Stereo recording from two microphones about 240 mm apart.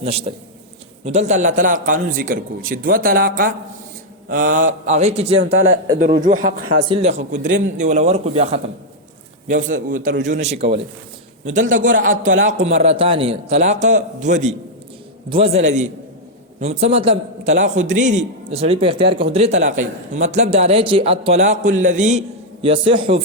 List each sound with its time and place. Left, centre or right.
0.0 s a man's voice: right